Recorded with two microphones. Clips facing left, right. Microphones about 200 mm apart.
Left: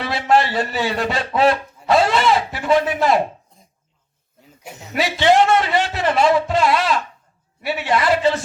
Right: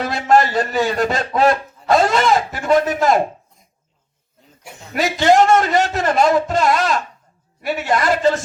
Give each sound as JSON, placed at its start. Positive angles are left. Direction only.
{"t": 0.0, "sound": "a man's voice", "side_deg": -45}
{"t": 4.9, "sound": "a man's voice", "side_deg": -45}